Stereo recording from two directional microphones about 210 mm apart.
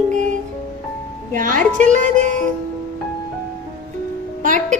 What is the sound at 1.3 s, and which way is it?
Music, 40° right (ahead or behind).